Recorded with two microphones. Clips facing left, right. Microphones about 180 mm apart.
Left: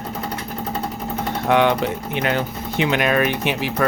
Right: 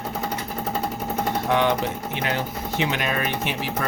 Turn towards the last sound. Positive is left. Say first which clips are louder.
# left 6 dB
turn(degrees=70)  # may be behind; listen again after turning